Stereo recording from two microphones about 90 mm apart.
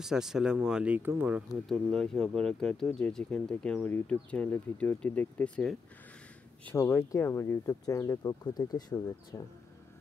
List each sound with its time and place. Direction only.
0.0 s speech: 5° right (ahead or behind)
1.5 s speech: 5° left (ahead or behind)
6.8 s speech: 25° left (ahead or behind); by 9.0 s 50° left (ahead or behind)
9.3 s speech: 35° left (ahead or behind)